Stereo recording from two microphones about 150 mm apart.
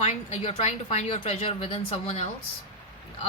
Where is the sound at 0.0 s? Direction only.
50° left (ahead or behind).